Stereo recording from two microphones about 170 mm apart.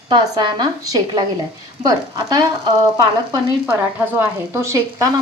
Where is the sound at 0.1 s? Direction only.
25° right (ahead or behind).